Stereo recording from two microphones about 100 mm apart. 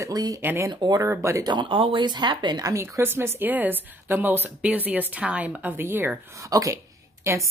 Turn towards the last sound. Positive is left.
turn(degrees=-30)  # may be behind; listen again after turning